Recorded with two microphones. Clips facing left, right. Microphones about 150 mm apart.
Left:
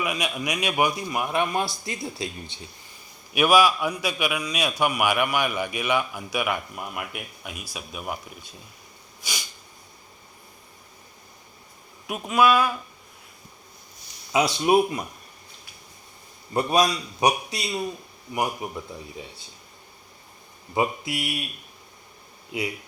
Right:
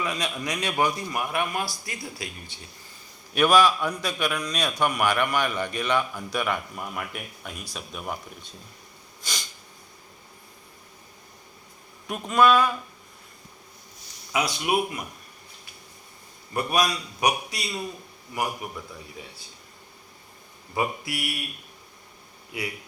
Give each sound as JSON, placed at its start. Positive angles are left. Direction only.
{"t": 0.0, "sound": "a man's voice", "side_deg": 10}
{"t": 3.3, "sound": "a man's voice", "side_deg": 10}
{"t": 9.2, "sound": "a sound", "side_deg": 10}
{"t": 12.0, "sound": "speech", "side_deg": 5}
{"t": 14.3, "sound": "a man's voice", "side_deg": 30}
{"t": 16.6, "sound": "a man's voice", "side_deg": 25}
{"t": 20.7, "sound": "a man's voice", "side_deg": 20}
{"t": 22.5, "sound": "a man's voice", "side_deg": 20}